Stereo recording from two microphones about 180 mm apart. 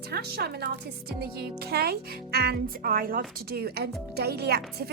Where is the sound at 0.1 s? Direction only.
60° right (ahead or behind).